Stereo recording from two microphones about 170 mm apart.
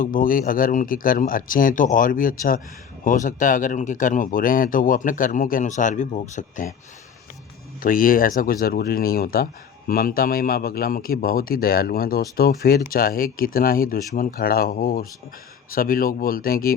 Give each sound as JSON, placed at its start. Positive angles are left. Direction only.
{"t": 0.0, "sound": "speech", "side_deg": 55}
{"t": 7.8, "sound": "speech", "side_deg": 55}